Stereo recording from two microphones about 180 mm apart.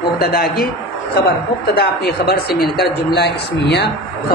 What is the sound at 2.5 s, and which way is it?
Speech, centre (ahead or behind).